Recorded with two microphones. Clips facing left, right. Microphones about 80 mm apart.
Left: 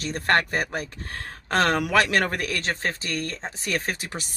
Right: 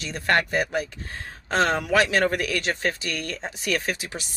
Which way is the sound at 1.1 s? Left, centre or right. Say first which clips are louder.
Left 1 dB; left.